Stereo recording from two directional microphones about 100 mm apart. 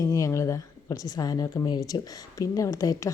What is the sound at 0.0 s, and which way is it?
A woman's voice, 30° left (ahead or behind).